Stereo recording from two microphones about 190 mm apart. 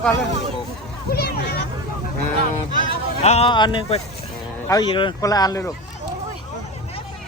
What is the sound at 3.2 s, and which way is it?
Speech, 30° left (ahead or behind).